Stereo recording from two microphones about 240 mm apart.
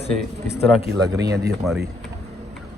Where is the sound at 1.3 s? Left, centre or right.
Right.